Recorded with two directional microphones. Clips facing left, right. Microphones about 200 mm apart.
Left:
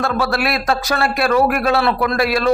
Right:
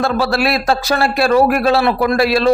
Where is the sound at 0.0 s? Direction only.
30° right (ahead or behind).